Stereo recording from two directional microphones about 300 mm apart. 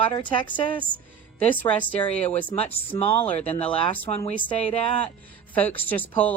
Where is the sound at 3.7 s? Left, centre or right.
Centre.